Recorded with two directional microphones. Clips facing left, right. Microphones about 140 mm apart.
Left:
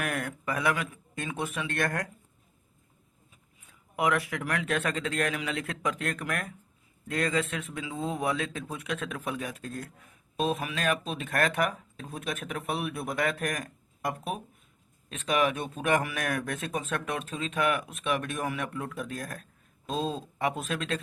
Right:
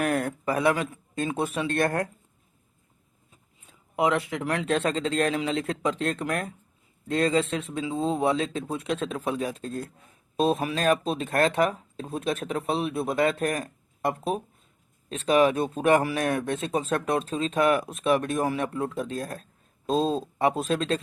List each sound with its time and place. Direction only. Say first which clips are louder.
0.0 s speech: right 7 dB; 30° right (ahead or behind)
3.7 s speech: right 3 dB; 25° right (ahead or behind)